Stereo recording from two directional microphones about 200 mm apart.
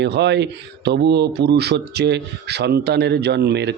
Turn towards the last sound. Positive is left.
turn(degrees=-55)  # may be behind; listen again after turning